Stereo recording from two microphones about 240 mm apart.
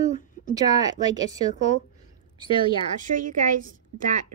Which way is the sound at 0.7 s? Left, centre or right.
Centre.